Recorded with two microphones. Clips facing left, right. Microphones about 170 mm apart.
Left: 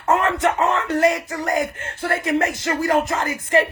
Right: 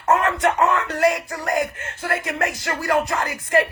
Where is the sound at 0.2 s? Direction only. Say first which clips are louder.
Left 1 dB; 30° left (ahead or behind).